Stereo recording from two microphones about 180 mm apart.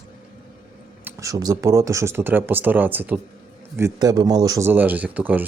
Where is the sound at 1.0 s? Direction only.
20° right (ahead or behind).